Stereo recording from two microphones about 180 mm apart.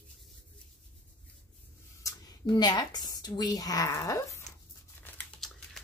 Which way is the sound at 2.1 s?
20° left (ahead or behind).